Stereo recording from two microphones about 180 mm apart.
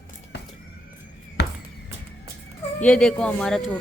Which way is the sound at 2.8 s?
5° left (ahead or behind).